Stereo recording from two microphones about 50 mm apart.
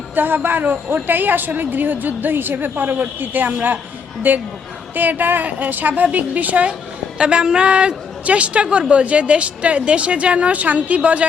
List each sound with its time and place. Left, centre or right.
0.2 s a man's voice: right
7.2 s a woman's voice: right